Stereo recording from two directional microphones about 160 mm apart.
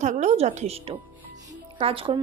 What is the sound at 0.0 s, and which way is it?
A woman's voice, 45° right (ahead or behind).